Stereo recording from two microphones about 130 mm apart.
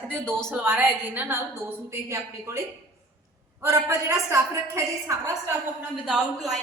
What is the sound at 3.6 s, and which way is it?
A woman's voice, 25° right (ahead or behind).